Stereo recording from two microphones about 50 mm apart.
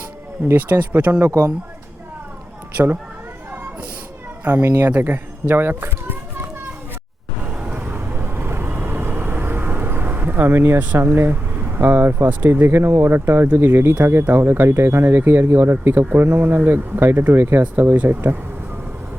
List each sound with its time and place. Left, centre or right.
0.5 s speech: right
4.4 s speech: right
7.4 s vehicle: right
7.8 s vehicle: right
10.9 s speech: right